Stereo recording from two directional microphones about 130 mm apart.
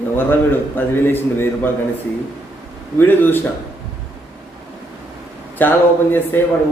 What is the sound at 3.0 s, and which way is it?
Speech, 15° left (ahead or behind).